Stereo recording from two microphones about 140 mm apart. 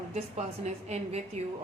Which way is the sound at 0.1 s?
50° right (ahead or behind).